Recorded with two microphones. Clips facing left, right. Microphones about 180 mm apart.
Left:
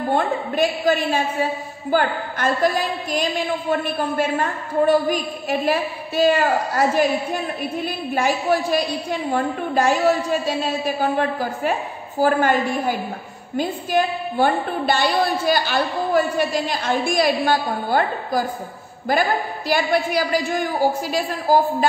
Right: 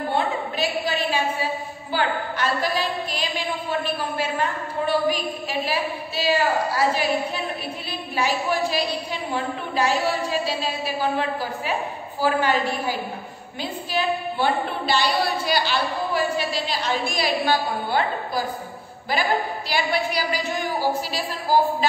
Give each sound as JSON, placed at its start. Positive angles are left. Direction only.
{"t": 0.1, "sound": "a sound", "side_deg": 45}
{"t": 1.9, "sound": "a woman's voice", "side_deg": 50}
{"t": 8.1, "sound": "a woman's voice", "side_deg": 45}
{"t": 11.0, "sound": "a woman's voice", "side_deg": 50}
{"t": 19.7, "sound": "a woman's voice", "side_deg": 50}